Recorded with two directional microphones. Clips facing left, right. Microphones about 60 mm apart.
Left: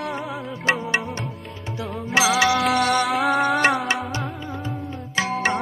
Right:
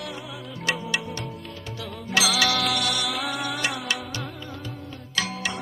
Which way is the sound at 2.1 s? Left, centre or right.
Left.